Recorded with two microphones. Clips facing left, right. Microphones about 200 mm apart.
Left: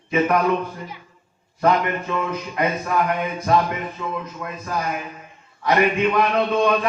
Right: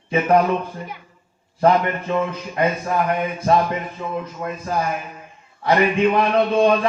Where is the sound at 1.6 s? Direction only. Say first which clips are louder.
Right 2 dB; 30° right (ahead or behind).